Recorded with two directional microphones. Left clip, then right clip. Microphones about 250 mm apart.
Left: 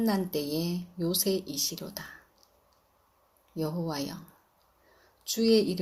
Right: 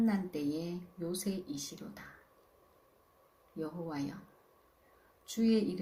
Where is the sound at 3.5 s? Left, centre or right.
Left.